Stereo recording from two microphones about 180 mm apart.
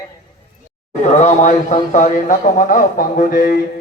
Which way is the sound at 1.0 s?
40° left (ahead or behind).